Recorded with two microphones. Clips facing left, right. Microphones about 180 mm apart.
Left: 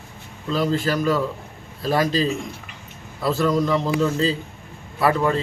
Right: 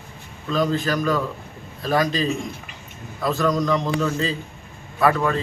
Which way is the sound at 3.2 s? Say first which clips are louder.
Left 1 dB; 30° left (ahead or behind).